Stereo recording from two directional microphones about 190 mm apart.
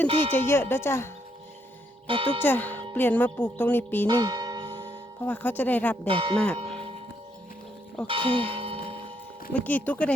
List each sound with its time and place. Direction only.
0.3 s speech: 10° left (ahead or behind)
2.0 s speech: 25° right (ahead or behind)
2.4 s music: 10° left (ahead or behind)
2.9 s speech: 10° left (ahead or behind)
4.0 s music: 20° right (ahead or behind)
5.2 s speech: 10° left (ahead or behind)
6.1 s speech: 30° right (ahead or behind)
6.3 s speech: 5° left (ahead or behind)
8.0 s church bell: 30° right (ahead or behind)
9.5 s speech: 10° left (ahead or behind)